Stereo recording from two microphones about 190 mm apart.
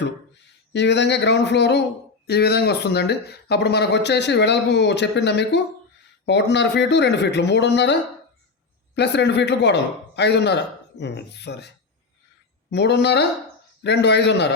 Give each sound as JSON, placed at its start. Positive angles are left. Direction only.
{"t": 0.7, "sound": "speech", "side_deg": 65}
{"t": 9.0, "sound": "speech", "side_deg": 65}
{"t": 12.7, "sound": "speech", "side_deg": 65}